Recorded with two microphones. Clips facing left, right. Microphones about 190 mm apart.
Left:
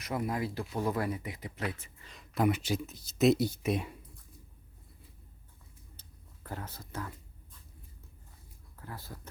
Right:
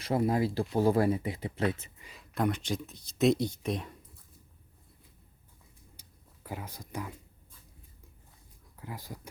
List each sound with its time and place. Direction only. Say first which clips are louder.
0.0 s speech: right 6 dB; 30° right (ahead or behind)
2.0 s speech: left 2 dB; centre (ahead or behind)
6.0 s a sound: right 2 dB; 10° right (ahead or behind)
8.8 s speech: right 3 dB; 15° right (ahead or behind)